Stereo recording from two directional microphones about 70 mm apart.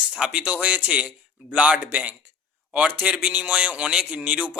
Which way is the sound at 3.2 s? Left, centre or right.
Centre.